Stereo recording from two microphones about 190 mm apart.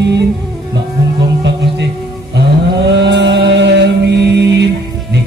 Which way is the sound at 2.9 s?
65° right (ahead or behind).